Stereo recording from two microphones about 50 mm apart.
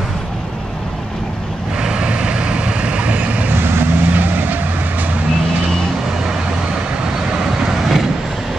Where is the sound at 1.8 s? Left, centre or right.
Centre.